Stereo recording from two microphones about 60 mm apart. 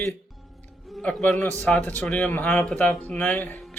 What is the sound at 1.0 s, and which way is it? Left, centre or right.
Speech, left.